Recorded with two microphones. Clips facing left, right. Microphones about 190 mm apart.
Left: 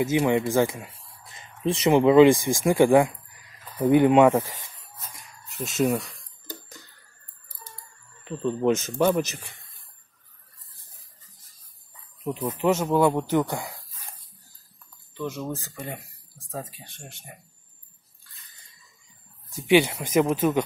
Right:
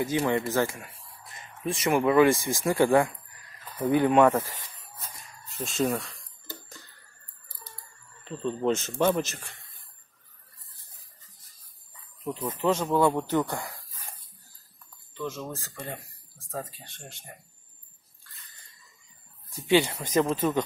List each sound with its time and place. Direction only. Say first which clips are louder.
0.0 s speech: left 4 dB; 15° left (ahead or behind)
5.6 s a sound: left 3 dB; 15° left (ahead or behind)
8.2 s speech: left 4 dB; 10° left (ahead or behind)
8.7 s speech: left 3 dB; centre (ahead or behind)
12.2 s speech: left 3 dB; 10° left (ahead or behind)
15.1 s speech: left 3 dB; 15° left (ahead or behind)
19.5 s speech: left 3 dB; 15° left (ahead or behind)